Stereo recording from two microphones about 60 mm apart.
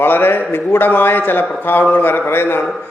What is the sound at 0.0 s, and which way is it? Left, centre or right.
A man's voice, left.